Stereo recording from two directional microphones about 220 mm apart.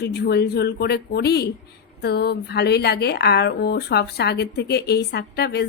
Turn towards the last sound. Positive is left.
turn(degrees=50)  # may be behind; listen again after turning